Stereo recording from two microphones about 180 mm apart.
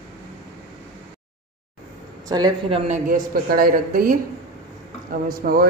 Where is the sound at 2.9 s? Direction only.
50° right (ahead or behind).